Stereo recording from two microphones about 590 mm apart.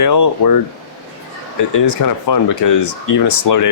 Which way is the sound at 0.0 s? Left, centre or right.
Left.